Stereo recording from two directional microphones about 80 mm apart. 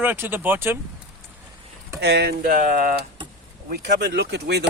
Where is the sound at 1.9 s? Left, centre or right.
Right.